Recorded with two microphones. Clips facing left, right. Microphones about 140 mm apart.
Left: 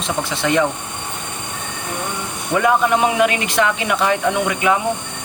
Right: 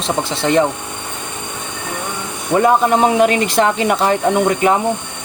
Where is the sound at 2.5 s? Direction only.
35° right (ahead or behind).